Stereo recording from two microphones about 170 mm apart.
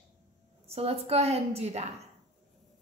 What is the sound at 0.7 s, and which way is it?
A woman's voice, 35° right (ahead or behind).